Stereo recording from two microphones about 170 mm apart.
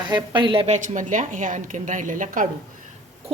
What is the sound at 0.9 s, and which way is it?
A woman's voice, 50° right (ahead or behind).